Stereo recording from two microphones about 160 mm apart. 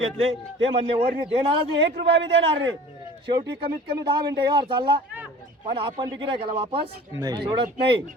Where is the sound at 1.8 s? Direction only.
90° right.